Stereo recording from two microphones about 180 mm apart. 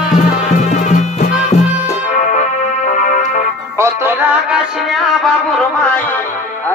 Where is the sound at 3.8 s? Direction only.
10° right (ahead or behind).